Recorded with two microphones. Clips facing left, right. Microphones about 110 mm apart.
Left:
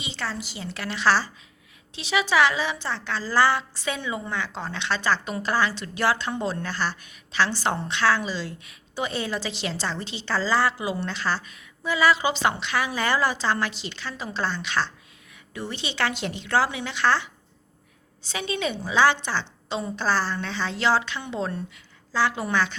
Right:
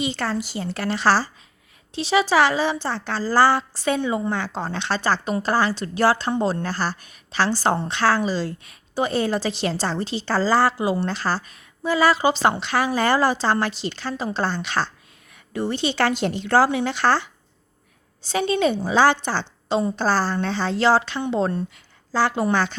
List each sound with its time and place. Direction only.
0.0 s a woman's voice: 50° right (ahead or behind)
18.3 s a woman's voice: 40° right (ahead or behind)